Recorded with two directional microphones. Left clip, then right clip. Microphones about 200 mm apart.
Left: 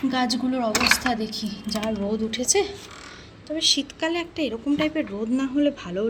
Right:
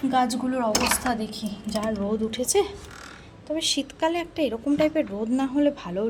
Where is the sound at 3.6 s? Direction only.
45° right (ahead or behind).